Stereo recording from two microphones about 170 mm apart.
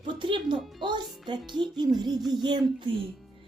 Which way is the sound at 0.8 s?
25° right (ahead or behind).